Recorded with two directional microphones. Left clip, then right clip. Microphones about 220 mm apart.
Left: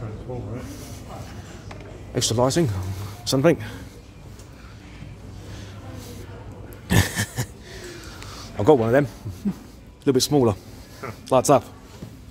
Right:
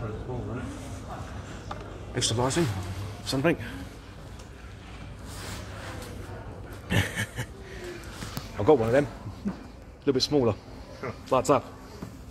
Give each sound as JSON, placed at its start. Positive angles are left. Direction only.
{"t": 2.1, "sound": "a man's voice", "side_deg": 50}
{"t": 6.9, "sound": "a sound", "side_deg": 50}
{"t": 8.5, "sound": "speech", "side_deg": 45}
{"t": 10.0, "sound": "a man's voice", "side_deg": 45}